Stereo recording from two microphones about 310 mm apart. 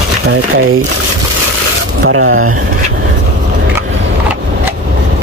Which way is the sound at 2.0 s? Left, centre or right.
Right.